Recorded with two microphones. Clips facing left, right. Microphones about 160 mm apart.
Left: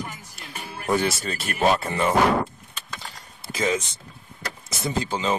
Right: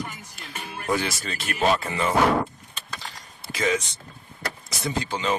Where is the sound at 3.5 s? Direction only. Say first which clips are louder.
Even; 25° left (ahead or behind).